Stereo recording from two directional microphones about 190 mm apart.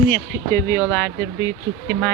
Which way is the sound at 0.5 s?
15° left (ahead or behind).